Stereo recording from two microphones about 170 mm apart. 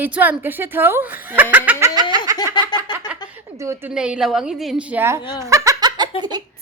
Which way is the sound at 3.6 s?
15° right (ahead or behind).